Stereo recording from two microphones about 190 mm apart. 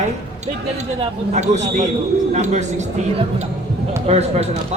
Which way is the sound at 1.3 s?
35° right (ahead or behind).